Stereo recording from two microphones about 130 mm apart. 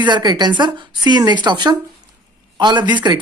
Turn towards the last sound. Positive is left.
turn(degrees=-35)  # may be behind; listen again after turning